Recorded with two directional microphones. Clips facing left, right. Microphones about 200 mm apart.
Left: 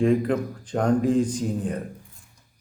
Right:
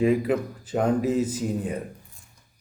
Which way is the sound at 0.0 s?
5° right (ahead or behind).